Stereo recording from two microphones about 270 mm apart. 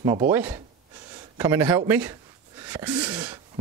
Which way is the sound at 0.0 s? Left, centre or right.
Centre.